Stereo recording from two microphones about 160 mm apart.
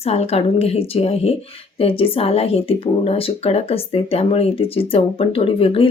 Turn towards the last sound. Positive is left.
turn(degrees=35)  # may be behind; listen again after turning